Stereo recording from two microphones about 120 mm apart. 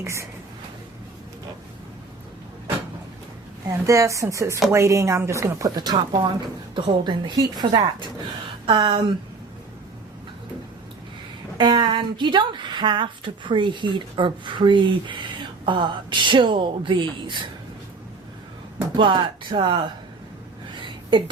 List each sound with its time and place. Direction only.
0.0 s speech: 25° right (ahead or behind)
3.7 s speech: 25° right (ahead or behind); by 9.1 s 40° right (ahead or behind)
11.5 s speech: 40° right (ahead or behind)
18.9 s speech: 40° right (ahead or behind)
20.8 s a sound: 40° right (ahead or behind)